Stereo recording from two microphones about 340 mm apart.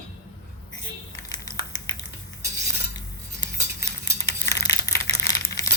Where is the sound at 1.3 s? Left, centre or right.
Centre.